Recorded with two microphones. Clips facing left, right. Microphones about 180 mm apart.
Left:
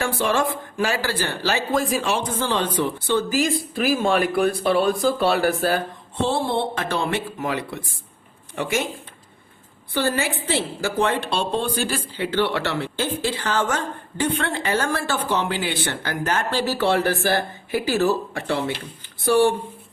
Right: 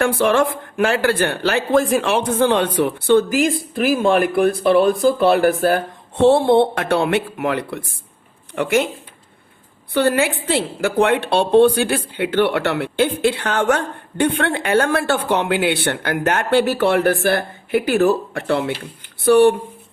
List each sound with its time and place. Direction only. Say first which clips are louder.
0.0 s a woman's voice: right 6 dB; 60° right (ahead or behind)
9.9 s a woman's voice: right 6 dB; 60° right (ahead or behind)